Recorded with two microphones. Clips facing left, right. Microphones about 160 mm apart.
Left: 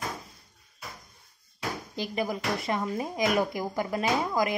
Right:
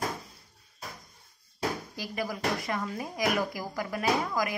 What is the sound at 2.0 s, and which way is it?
Speech, 20° left (ahead or behind).